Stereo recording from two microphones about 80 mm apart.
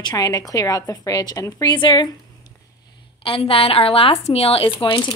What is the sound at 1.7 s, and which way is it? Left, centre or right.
Speech, left.